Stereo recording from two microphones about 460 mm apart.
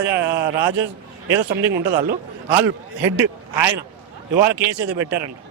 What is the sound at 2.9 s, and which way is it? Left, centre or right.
Speech, right.